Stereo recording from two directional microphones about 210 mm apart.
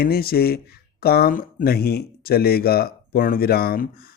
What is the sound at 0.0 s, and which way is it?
Speech, 45° left (ahead or behind).